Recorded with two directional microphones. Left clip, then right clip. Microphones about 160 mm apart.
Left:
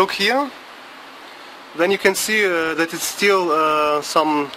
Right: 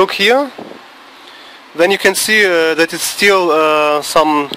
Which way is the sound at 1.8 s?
35° right (ahead or behind).